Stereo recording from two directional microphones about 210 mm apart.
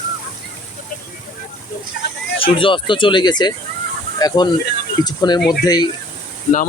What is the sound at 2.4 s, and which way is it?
Speech, 25° left (ahead or behind).